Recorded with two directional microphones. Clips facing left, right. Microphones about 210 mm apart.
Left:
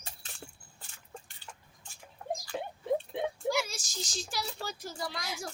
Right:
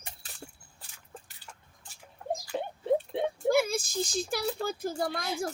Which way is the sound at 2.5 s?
25° right (ahead or behind).